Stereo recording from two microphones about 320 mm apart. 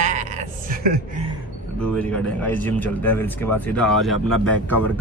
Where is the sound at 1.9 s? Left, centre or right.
Centre.